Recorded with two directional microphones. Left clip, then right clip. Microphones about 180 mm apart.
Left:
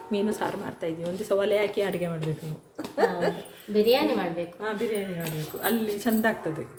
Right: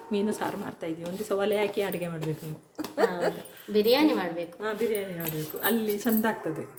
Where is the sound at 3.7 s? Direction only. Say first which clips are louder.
Left 1 dB; 50° right (ahead or behind).